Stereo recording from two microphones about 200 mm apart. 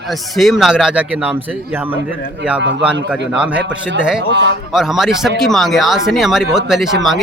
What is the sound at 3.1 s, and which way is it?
Speech, 5° right (ahead or behind).